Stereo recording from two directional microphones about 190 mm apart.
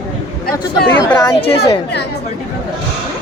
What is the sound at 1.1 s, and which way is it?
Speech, 20° left (ahead or behind).